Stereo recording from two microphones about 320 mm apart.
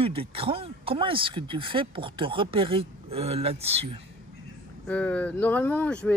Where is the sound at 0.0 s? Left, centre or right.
Centre.